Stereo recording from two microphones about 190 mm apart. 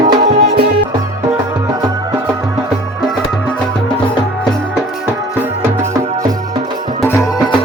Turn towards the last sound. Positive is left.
turn(degrees=15)  # may be behind; listen again after turning